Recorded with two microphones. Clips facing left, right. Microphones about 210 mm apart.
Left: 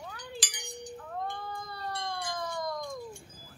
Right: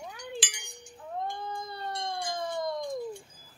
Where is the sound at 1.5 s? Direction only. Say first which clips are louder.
Right 2 dB; 25° right (ahead or behind).